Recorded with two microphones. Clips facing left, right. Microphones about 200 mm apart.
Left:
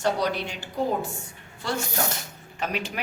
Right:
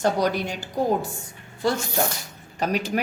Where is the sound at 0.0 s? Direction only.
45° right (ahead or behind).